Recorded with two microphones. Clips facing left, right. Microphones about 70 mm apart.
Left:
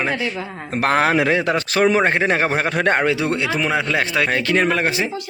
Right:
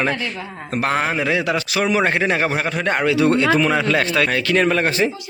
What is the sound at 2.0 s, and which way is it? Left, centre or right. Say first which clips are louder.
A man's voice: left 1 dB; left.